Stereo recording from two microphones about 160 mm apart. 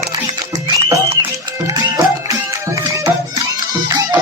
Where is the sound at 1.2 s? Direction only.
25° right (ahead or behind).